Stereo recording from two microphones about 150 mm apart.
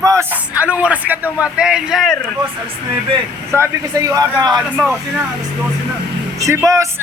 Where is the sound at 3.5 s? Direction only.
20° right (ahead or behind).